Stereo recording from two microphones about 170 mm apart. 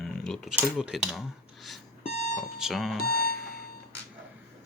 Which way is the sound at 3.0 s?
60° left (ahead or behind).